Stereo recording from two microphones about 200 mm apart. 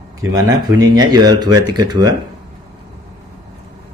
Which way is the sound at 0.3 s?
15° right (ahead or behind).